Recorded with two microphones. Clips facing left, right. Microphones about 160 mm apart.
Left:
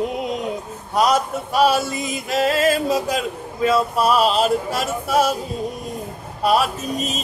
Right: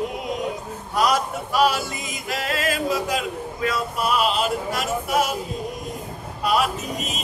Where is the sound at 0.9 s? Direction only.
25° left (ahead or behind).